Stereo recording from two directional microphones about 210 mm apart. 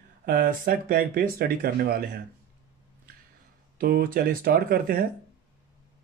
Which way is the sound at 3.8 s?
45° right (ahead or behind).